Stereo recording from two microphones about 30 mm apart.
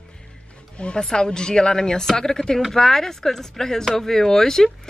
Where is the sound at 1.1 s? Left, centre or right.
Left.